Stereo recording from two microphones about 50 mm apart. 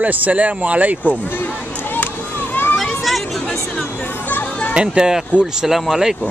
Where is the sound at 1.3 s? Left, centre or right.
Left.